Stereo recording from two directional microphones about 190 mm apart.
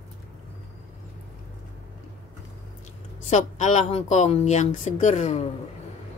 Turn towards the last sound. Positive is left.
turn(degrees=35)  # may be behind; listen again after turning